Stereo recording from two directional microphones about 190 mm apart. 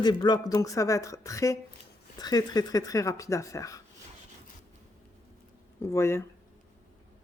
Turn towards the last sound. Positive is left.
turn(degrees=15)  # may be behind; listen again after turning